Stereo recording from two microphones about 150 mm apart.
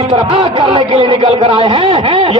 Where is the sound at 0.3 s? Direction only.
40° right (ahead or behind).